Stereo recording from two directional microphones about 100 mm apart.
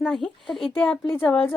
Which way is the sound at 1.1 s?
20° left (ahead or behind).